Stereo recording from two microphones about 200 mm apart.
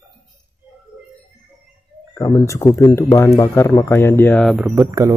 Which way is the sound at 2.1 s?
20° left (ahead or behind).